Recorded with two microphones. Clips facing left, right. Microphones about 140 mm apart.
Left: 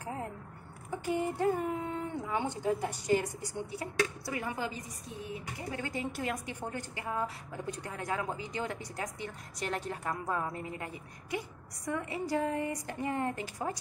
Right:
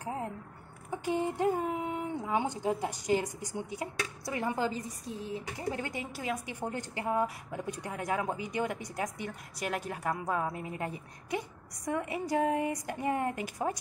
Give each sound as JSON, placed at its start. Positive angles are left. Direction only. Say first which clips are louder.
{"t": 0.0, "sound": "a sound", "louder": "right 2 dB", "side_deg": -20}
{"t": 0.8, "sound": "speech", "louder": "right 1 dB", "side_deg": -20}
{"t": 6.1, "sound": "speech", "louder": "even", "side_deg": -5}
{"t": 7.0, "sound": "speech", "louder": "right 6 dB", "side_deg": -20}